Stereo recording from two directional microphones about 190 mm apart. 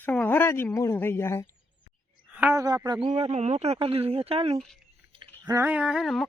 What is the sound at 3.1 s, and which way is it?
Speech, 35° right (ahead or behind).